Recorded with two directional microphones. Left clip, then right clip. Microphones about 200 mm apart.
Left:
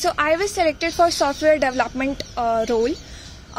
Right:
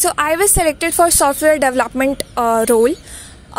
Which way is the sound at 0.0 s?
45° right (ahead or behind).